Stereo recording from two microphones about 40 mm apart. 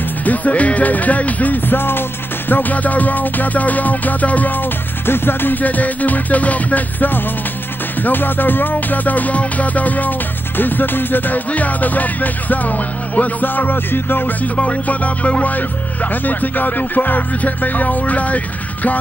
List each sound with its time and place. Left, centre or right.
0.2 s music: left
1.8 s music: left
2.5 s music: left
5.0 s music: left
5.6 s music: left
8.0 s music: left
10.6 s music: left
14.4 s music: left
15.5 s music: left